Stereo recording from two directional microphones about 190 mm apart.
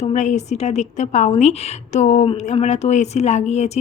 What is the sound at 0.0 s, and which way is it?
A woman's voice, 40° left (ahead or behind).